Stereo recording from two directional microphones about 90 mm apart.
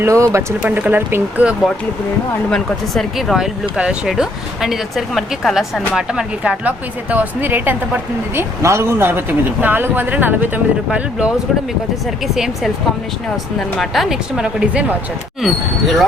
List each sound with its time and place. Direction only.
0.0 s a man's voice: 30° right (ahead or behind)
2.5 s a man's voice: centre (ahead or behind)